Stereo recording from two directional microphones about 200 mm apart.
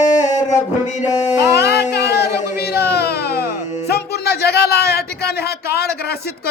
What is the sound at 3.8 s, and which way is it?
A man's voice, 55° left (ahead or behind).